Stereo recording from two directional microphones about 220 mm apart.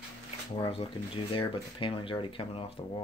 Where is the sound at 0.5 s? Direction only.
25° left (ahead or behind).